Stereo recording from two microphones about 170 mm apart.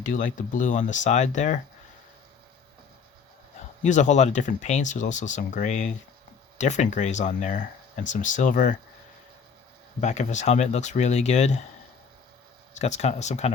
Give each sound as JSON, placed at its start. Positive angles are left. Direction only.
{"t": 0.0, "sound": "speech", "side_deg": 50}
{"t": 3.8, "sound": "speech", "side_deg": 45}
{"t": 10.0, "sound": "speech", "side_deg": 45}
{"t": 12.8, "sound": "speech", "side_deg": 40}